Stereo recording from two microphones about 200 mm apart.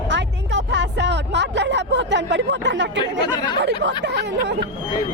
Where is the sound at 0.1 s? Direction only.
65° right (ahead or behind).